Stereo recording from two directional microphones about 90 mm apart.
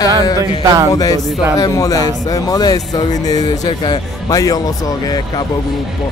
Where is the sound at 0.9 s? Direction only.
45° left (ahead or behind).